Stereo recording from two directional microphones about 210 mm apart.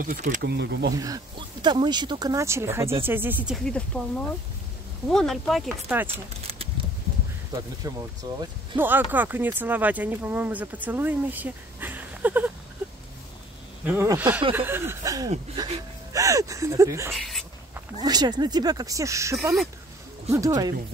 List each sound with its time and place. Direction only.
0.0 s speech: 40° right (ahead or behind)
0.9 s speech: 15° right (ahead or behind); by 4.0 s 5° left (ahead or behind)
5.0 s speech: centre (ahead or behind)
5.9 s speech: 10° right (ahead or behind)
7.8 s speech: 15° right (ahead or behind)
13.8 s speech: 10° right (ahead or behind)
17.1 s a sound: centre (ahead or behind)
18.0 s speech: 20° right (ahead or behind)